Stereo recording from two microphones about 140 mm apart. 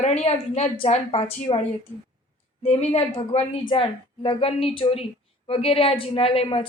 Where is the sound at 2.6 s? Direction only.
45° left (ahead or behind).